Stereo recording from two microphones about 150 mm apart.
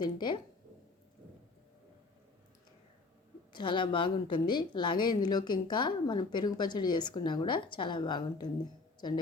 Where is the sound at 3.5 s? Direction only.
30° left (ahead or behind).